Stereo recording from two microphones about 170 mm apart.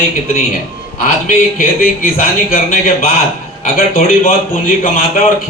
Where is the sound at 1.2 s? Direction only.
55° left (ahead or behind).